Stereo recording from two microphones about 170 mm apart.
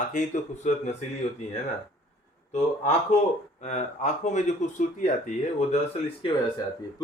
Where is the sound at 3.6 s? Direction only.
40° left (ahead or behind).